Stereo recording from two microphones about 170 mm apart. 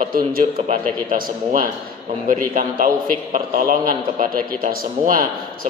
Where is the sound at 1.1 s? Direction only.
55° right (ahead or behind).